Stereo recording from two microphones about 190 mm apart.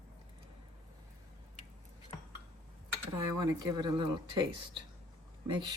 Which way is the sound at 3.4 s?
20° right (ahead or behind).